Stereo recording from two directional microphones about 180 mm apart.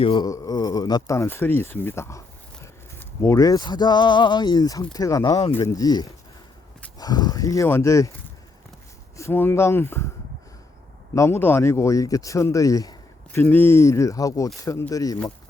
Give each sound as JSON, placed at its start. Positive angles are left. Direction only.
{"t": 0.0, "sound": "speech", "side_deg": 30}
{"t": 0.3, "sound": "speech", "side_deg": 20}
{"t": 9.1, "sound": "speech", "side_deg": 15}
{"t": 11.1, "sound": "speech", "side_deg": 15}